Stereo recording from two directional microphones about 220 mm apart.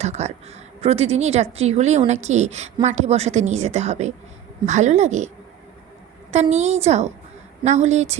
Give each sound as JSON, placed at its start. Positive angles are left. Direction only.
{"t": 0.0, "sound": "a woman's voice", "side_deg": -30}
{"t": 6.3, "sound": "a woman's voice", "side_deg": -30}